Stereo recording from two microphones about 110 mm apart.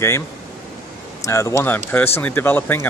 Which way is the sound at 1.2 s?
30° left (ahead or behind).